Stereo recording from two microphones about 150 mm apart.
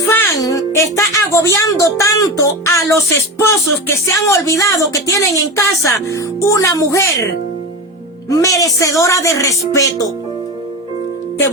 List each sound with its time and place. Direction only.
0.0 s speech: 15° left (ahead or behind)
8.3 s speech: 20° left (ahead or behind)